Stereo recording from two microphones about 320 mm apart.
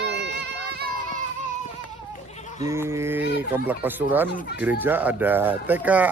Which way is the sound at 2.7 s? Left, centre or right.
Centre.